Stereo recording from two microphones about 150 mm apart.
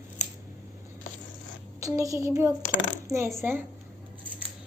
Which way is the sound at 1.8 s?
20° right (ahead or behind).